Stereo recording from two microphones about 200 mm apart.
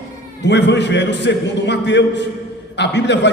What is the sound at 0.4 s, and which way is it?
A man's voice, 60° left (ahead or behind).